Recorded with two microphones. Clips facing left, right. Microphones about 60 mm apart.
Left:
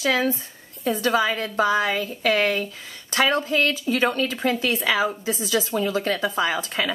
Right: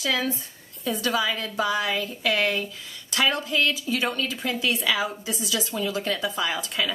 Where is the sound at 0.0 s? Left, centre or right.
Left.